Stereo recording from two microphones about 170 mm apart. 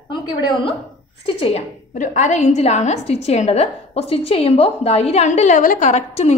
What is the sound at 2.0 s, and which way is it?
A woman's voice, 45° left (ahead or behind).